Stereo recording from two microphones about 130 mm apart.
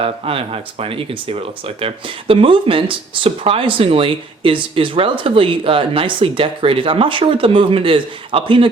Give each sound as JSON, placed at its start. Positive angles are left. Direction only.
{"t": 0.0, "sound": "speech", "side_deg": -45}